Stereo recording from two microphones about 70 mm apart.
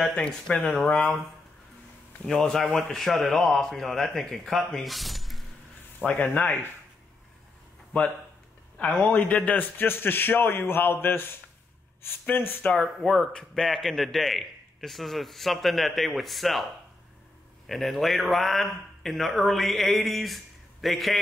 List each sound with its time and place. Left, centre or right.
0.5 s a man's voice: centre
2.2 s a man's voice: centre
6.0 s a man's voice: left
7.9 s a man's voice: left
12.7 s a man's voice: centre
17.6 s a man's voice: centre